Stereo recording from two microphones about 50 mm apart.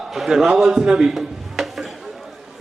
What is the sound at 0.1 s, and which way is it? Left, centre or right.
A man's voice, centre.